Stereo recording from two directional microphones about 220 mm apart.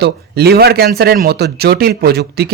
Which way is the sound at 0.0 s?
45° right (ahead or behind).